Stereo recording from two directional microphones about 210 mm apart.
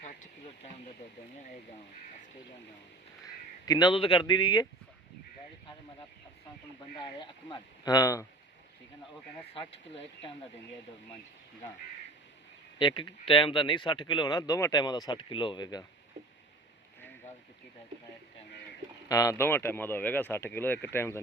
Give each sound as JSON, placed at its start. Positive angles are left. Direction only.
{"t": 0.0, "sound": "a sound", "side_deg": 35}
{"t": 3.7, "sound": "speech", "side_deg": 20}
{"t": 7.0, "sound": "speech", "side_deg": 20}
{"t": 9.5, "sound": "speech", "side_deg": 25}
{"t": 12.8, "sound": "speech", "side_deg": 25}
{"t": 19.0, "sound": "speech", "side_deg": 15}